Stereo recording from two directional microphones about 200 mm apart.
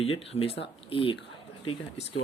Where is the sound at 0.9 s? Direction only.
25° left (ahead or behind).